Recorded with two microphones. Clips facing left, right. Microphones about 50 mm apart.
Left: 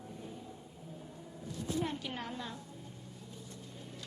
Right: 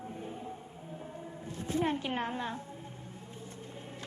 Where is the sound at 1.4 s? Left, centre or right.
Right.